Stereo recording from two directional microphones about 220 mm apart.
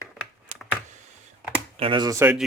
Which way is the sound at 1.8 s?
20° right (ahead or behind).